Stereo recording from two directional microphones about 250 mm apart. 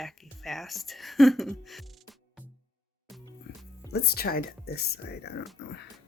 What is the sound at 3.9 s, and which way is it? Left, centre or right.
Speech, left.